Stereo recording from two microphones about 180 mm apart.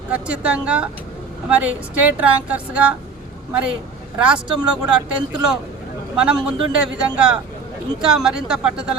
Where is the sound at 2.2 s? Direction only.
5° right (ahead or behind).